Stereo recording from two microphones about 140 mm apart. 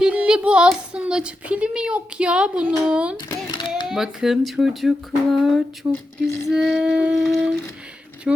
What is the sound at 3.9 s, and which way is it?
A child's voice, 5° right (ahead or behind).